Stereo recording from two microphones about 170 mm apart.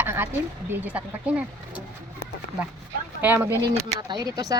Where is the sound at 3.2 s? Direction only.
10° right (ahead or behind).